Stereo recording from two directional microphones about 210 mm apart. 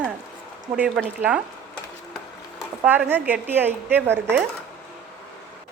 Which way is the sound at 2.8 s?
10° right (ahead or behind).